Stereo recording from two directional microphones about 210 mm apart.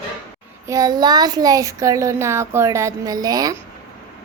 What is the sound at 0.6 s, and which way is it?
A child's voice, 15° right (ahead or behind).